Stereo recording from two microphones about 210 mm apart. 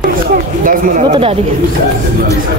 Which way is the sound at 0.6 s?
35° right (ahead or behind).